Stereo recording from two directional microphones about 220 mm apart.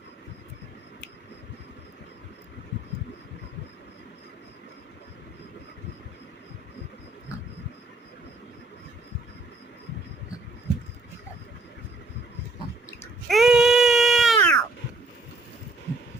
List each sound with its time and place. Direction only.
13.2 s baby cry: centre (ahead or behind)